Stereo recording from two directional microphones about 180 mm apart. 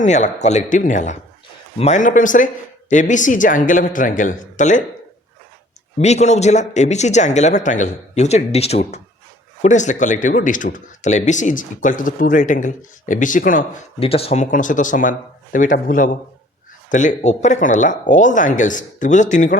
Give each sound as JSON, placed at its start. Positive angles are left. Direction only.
{"t": 0.0, "sound": "speech", "side_deg": 40}
{"t": 6.0, "sound": "speech", "side_deg": 40}
{"t": 14.0, "sound": "speech", "side_deg": 30}
{"t": 14.5, "sound": "speech", "side_deg": 45}